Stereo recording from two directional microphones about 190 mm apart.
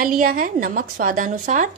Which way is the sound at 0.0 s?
45° right (ahead or behind).